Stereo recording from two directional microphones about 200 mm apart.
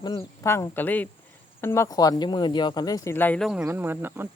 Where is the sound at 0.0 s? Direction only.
20° left (ahead or behind); by 3.6 s 5° left (ahead or behind).